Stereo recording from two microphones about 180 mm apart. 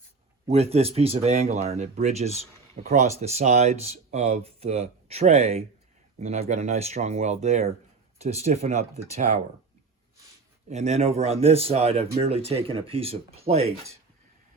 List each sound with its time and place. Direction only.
0.4 s a man's voice: 35° right (ahead or behind)
10.7 s a man's voice: 40° right (ahead or behind)